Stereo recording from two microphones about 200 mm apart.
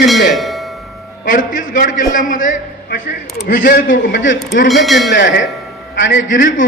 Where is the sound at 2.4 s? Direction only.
40° left (ahead or behind).